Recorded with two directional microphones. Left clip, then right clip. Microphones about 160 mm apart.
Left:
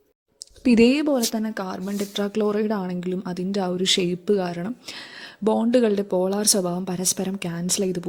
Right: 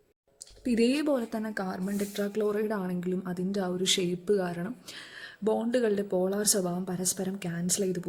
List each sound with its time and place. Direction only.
0.6 s speech: 45° left (ahead or behind)